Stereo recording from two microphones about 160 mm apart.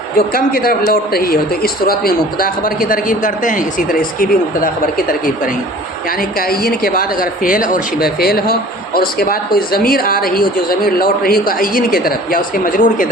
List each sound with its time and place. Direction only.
0.2 s a man's voice: 65° left (ahead or behind)
6.5 s a man's voice: 70° left (ahead or behind)